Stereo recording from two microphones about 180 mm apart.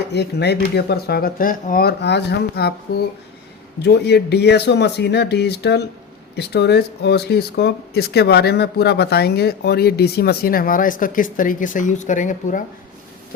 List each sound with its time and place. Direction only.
0.1 s speech: 70° left (ahead or behind)
3.8 s speech: 70° left (ahead or behind); by 12.6 s 45° left (ahead or behind)